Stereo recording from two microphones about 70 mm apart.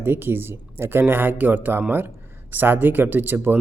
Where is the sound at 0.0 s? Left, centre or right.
Right.